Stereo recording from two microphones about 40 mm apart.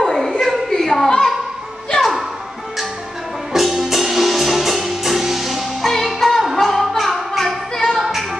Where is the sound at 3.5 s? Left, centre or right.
Centre.